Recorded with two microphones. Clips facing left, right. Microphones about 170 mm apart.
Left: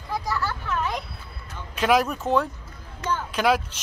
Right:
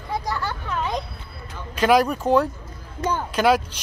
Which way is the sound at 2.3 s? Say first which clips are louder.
Right 4 dB; 40° right (ahead or behind).